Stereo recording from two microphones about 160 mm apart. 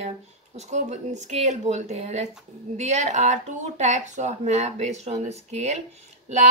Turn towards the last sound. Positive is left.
turn(degrees=-45)  # may be behind; listen again after turning